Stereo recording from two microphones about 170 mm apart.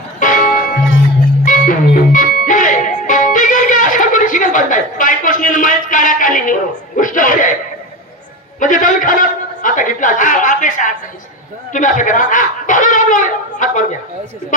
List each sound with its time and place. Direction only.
0.2 s music: 50° left (ahead or behind)
8.6 s a man's voice: 50° left (ahead or behind)